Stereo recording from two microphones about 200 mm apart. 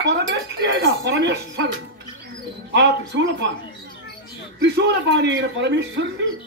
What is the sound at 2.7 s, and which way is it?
Speech, 60° right (ahead or behind).